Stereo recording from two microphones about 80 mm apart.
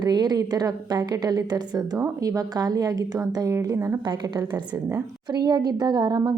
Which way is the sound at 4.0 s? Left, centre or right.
Right.